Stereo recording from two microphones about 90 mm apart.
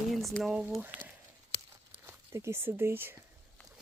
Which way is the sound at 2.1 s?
30° right (ahead or behind).